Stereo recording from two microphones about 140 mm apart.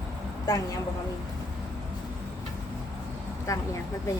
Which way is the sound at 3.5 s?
25° left (ahead or behind).